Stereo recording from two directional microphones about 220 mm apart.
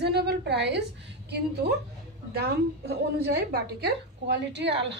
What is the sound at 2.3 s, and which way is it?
A woman's voice, 45° right (ahead or behind).